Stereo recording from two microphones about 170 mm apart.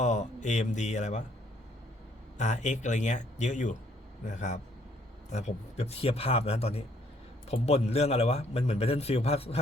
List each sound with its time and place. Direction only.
0.0 s speech: 45° left (ahead or behind)
2.4 s a man's voice: 45° left (ahead or behind)